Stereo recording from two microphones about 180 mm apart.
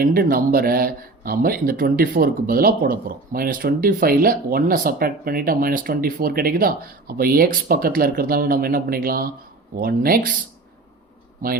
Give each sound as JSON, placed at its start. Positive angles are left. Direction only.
{"t": 0.0, "sound": "speech", "side_deg": -55}
{"t": 11.4, "sound": "speech", "side_deg": -50}